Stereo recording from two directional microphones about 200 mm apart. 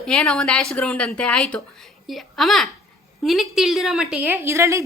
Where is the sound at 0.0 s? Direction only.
Centre (ahead or behind).